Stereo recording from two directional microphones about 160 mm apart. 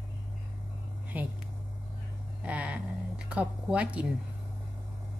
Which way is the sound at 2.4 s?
10° right (ahead or behind).